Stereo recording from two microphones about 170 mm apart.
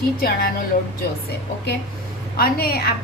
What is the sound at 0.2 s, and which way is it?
Speech, 65° left (ahead or behind).